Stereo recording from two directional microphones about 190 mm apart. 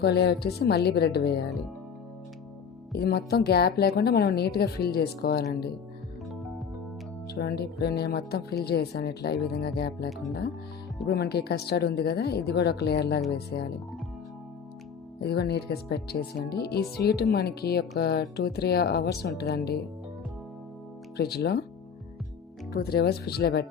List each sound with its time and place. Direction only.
0.0 s speech: 60° left (ahead or behind)
2.9 s speech: 55° left (ahead or behind)
7.3 s speech: 60° left (ahead or behind)
11.1 s speech: 60° left (ahead or behind)
15.2 s speech: 60° left (ahead or behind)
21.2 s speech: 60° left (ahead or behind)
22.7 s speech: 55° left (ahead or behind)